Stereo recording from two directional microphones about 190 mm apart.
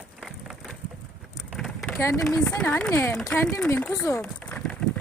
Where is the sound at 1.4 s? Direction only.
Centre (ahead or behind).